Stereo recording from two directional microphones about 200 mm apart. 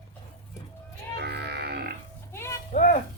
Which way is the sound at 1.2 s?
55° right (ahead or behind).